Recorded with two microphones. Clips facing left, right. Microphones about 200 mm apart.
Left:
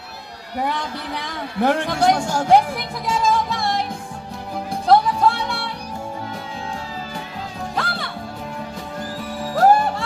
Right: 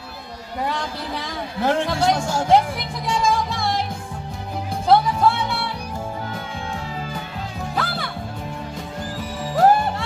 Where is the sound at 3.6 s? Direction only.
Centre (ahead or behind).